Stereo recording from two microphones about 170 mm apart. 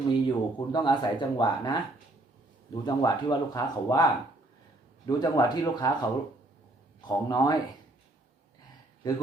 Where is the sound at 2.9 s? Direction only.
25° left (ahead or behind).